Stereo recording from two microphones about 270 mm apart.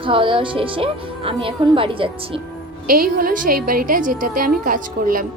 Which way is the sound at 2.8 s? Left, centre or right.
Right.